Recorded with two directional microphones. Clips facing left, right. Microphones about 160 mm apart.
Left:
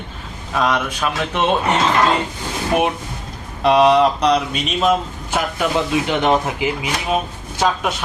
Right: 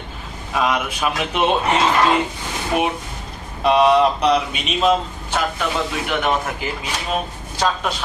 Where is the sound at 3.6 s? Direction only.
Centre (ahead or behind).